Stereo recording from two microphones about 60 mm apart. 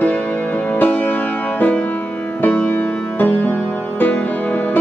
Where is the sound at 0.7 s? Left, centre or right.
Left.